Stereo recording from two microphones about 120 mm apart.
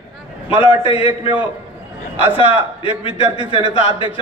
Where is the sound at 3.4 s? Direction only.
40° right (ahead or behind).